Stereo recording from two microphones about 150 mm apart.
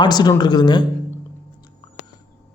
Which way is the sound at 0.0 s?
30° left (ahead or behind).